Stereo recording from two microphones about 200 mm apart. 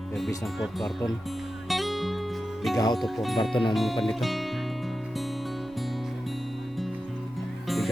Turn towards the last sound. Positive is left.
turn(degrees=0)  # may be behind; listen again after turning